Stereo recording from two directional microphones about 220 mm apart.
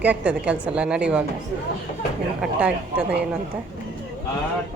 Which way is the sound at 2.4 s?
5° right (ahead or behind).